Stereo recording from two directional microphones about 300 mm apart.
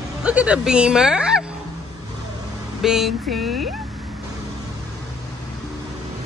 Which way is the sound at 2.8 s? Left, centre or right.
Centre.